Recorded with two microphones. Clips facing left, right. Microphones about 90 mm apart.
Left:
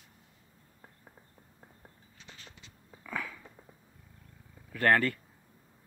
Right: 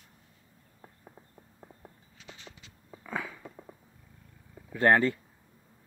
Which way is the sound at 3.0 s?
15° right (ahead or behind).